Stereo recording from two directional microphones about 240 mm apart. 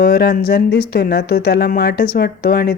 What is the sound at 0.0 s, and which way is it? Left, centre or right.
Speech, left.